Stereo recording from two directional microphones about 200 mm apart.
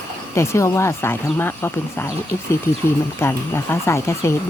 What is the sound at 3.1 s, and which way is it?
Speech, 15° left (ahead or behind).